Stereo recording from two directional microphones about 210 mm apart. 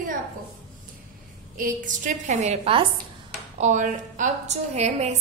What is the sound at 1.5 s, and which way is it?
A woman's voice, 35° right (ahead or behind).